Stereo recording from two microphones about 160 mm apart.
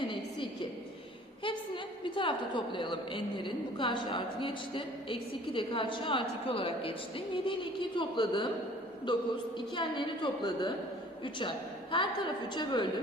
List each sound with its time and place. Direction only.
1.5 s a woman's voice: 30° left (ahead or behind)